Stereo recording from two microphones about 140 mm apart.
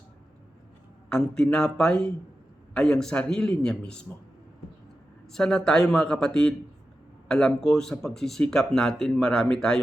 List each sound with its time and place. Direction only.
1.1 s speech: 5° left (ahead or behind)
5.3 s speech: 5° left (ahead or behind)